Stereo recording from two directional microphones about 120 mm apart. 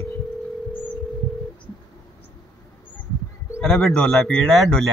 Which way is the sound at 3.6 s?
5° left (ahead or behind).